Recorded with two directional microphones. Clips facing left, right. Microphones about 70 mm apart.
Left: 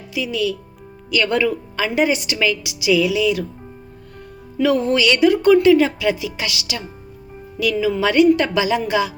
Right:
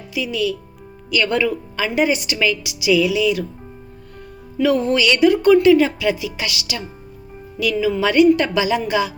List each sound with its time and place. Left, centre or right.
0.1 s speech: left
1.1 s speech: left
4.6 s speech: left
7.6 s speech: left